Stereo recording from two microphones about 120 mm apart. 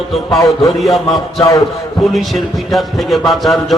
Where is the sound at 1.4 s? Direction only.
30° left (ahead or behind).